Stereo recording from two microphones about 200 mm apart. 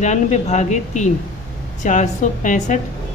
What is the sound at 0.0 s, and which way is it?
A woman's voice, 35° left (ahead or behind).